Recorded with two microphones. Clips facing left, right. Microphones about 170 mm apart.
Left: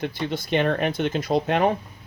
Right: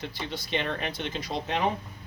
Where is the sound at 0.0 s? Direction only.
55° left (ahead or behind).